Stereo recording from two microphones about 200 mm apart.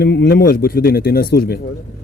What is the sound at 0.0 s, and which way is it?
Speech, 55° left (ahead or behind).